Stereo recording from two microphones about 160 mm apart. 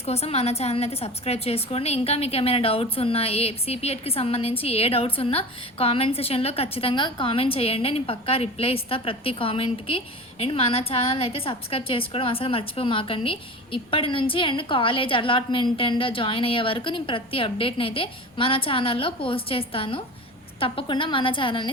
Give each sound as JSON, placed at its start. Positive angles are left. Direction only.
{"t": 0.0, "sound": "a woman's voice", "side_deg": 40}